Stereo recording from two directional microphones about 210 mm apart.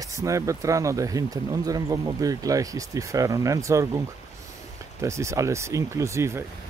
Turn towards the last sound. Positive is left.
turn(degrees=-15)  # may be behind; listen again after turning